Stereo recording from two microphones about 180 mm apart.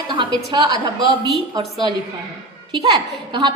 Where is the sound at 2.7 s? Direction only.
25° right (ahead or behind).